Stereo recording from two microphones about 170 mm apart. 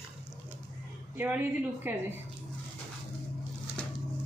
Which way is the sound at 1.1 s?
10° right (ahead or behind).